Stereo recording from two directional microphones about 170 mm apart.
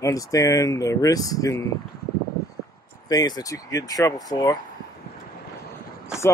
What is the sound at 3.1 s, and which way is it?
Speech, 20° left (ahead or behind).